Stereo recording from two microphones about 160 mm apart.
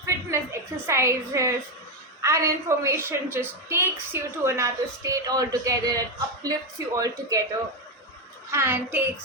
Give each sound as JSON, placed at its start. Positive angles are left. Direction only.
{"t": 0.0, "sound": "a sound", "side_deg": -20}
{"t": 0.9, "sound": "a woman's voice", "side_deg": -15}
{"t": 8.4, "sound": "a woman's voice", "side_deg": -15}